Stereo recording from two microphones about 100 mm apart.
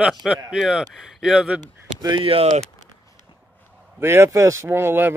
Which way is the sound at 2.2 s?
70° right (ahead or behind).